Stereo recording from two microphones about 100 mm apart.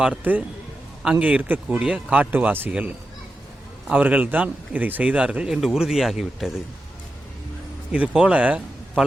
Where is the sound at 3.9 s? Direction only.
15° right (ahead or behind).